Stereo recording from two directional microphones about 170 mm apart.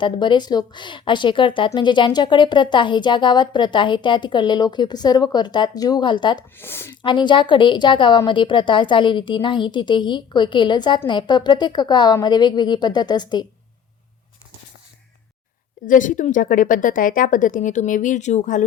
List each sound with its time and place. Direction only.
0.0 s speech: 25° left (ahead or behind)
6.6 s a woman's voice: 15° left (ahead or behind)
7.0 s speech: 30° left (ahead or behind)
15.9 s a woman's voice: 50° left (ahead or behind)